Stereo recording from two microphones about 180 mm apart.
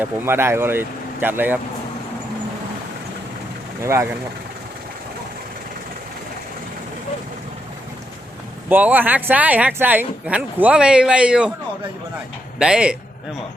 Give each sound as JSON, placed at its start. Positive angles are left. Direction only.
{"t": 0.0, "sound": "speech", "side_deg": -10}
{"t": 3.8, "sound": "speech", "side_deg": -15}
{"t": 8.7, "sound": "speech", "side_deg": -10}
{"t": 12.5, "sound": "speech", "side_deg": -5}